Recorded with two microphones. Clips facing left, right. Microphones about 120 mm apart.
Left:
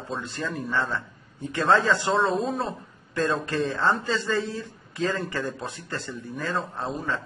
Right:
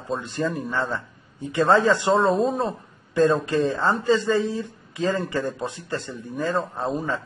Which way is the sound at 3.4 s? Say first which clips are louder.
Right 3 dB; 15° right (ahead or behind).